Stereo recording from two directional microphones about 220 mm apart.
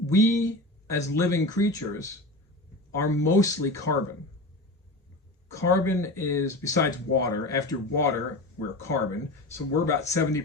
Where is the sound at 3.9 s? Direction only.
90° left.